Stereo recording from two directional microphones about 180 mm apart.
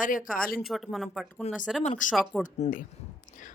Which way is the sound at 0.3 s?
50° left (ahead or behind).